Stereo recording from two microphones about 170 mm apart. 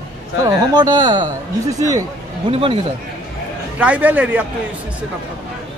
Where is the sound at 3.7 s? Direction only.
10° right (ahead or behind).